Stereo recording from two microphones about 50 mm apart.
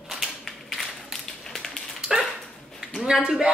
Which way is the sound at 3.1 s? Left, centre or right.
Centre.